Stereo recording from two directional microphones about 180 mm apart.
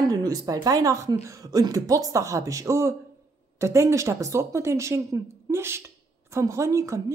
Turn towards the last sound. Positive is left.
turn(degrees=-15)  # may be behind; listen again after turning